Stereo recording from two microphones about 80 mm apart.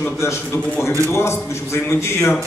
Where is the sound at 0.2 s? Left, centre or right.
Left.